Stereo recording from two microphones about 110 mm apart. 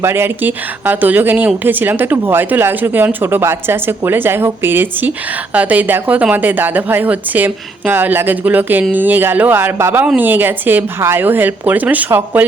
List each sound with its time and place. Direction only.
0.0 s a woman's voice: 20° right (ahead or behind)